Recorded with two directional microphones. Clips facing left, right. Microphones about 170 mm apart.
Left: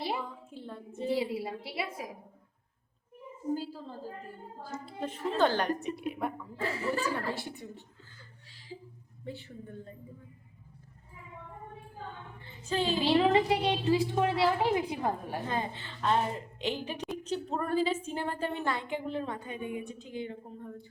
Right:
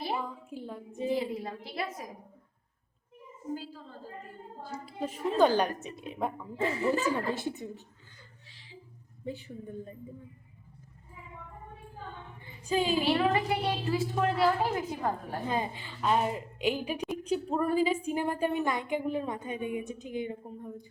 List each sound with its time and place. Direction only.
0.3 s a woman's voice: 10° right (ahead or behind)
1.2 s a woman's voice: 10° left (ahead or behind)
3.5 s a woman's voice: 35° left (ahead or behind)
4.9 s a woman's voice: 10° right (ahead or behind)
9.2 s a woman's voice: 15° right (ahead or behind)
12.5 s music: 10° right (ahead or behind)
13.1 s a woman's voice: 20° left (ahead or behind)
15.4 s a woman's voice: 15° right (ahead or behind)